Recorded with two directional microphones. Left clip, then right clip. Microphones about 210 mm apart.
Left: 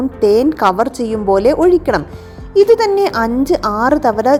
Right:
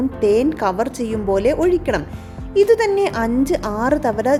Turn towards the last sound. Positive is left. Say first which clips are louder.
# left 5 dB
turn(degrees=10)  # may be behind; listen again after turning